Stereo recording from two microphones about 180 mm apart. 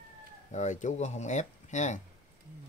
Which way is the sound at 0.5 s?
40° left (ahead or behind).